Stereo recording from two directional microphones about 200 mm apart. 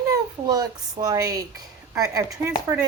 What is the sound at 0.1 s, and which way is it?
A child's voice, 20° right (ahead or behind).